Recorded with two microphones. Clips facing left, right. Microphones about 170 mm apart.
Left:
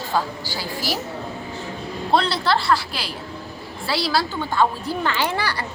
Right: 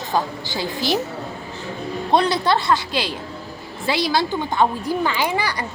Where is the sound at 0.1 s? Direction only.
20° right (ahead or behind).